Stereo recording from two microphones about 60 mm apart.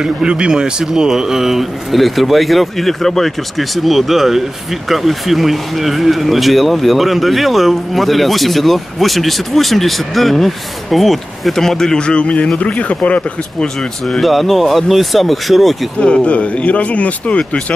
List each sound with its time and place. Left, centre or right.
0.0 s speech: centre; by 13.7 s left
14.2 s speech: centre
16.0 s speech: centre